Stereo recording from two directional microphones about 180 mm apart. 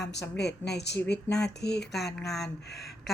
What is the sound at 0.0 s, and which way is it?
A woman's voice, 70° left (ahead or behind).